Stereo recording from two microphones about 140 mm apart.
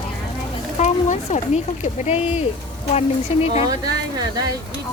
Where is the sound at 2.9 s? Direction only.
50° left (ahead or behind).